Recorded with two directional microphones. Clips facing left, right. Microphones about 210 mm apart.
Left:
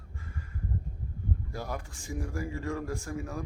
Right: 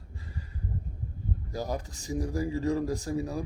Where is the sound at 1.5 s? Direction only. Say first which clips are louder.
Right 4 dB; 40° right (ahead or behind).